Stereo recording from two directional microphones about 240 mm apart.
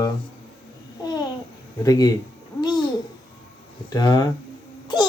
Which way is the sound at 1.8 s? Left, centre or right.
Centre.